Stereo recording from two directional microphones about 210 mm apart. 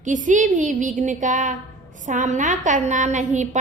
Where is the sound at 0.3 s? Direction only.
35° right (ahead or behind).